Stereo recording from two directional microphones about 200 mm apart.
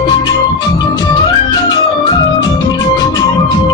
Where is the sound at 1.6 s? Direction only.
20° left (ahead or behind).